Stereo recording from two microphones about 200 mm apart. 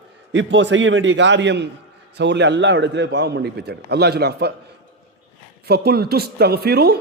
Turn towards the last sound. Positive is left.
turn(degrees=-50)  # may be behind; listen again after turning